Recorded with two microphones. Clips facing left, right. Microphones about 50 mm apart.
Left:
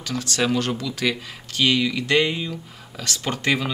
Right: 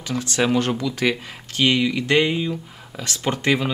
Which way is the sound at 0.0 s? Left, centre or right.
Right.